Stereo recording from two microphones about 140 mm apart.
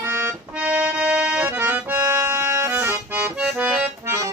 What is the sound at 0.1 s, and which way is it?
Accordion, 10° right (ahead or behind).